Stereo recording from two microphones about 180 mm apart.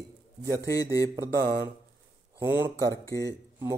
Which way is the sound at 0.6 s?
20° left (ahead or behind).